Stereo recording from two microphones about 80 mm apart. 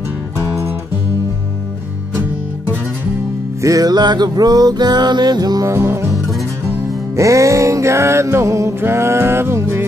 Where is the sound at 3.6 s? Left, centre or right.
Right.